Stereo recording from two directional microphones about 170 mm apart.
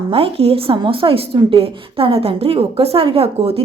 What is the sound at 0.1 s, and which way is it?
A woman's voice, 35° right (ahead or behind).